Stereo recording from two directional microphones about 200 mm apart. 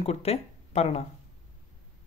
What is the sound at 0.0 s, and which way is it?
Speech, 30° left (ahead or behind).